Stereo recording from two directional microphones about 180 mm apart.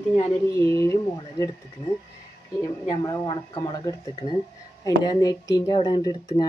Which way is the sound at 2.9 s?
20° left (ahead or behind).